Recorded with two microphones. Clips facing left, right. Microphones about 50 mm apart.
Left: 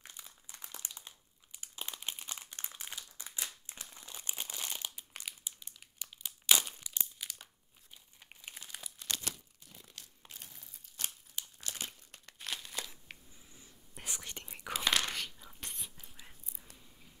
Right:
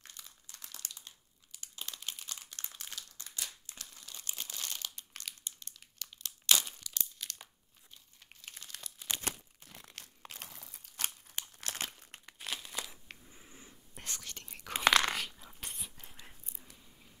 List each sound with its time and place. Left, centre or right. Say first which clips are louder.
0.0 s crumpling: left 1 dB; centre
9.2 s crumpling: right 4 dB; right
9.7 s crumpling: right 3 dB; right
10.2 s crumpling: right 5 dB; right
11.2 s crumpling: right 2 dB; right
12.3 s crumpling: right 1 dB; centre
13.3 s a sound: right 4 dB; right
13.9 s whispering: left 1 dB; centre
14.2 s whispering: left 2 dB; centre
14.9 s dog: right 6 dB; right
15.1 s dog: right 2 dB; centre
16.5 s a sound: even; centre